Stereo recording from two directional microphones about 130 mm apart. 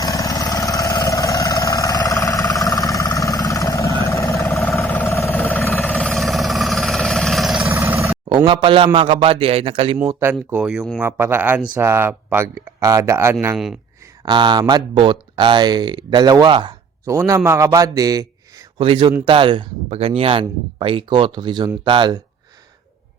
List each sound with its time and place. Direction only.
0.0 s vehicle: 25° left (ahead or behind); by 7.7 s centre (ahead or behind)
7.7 s vehicle: 15° right (ahead or behind)
8.4 s a man's voice: 40° right (ahead or behind)
10.2 s speech: 15° right (ahead or behind)
14.3 s speech: 35° right (ahead or behind)
17.1 s speech: 25° right (ahead or behind)
18.8 s speech: 40° right (ahead or behind)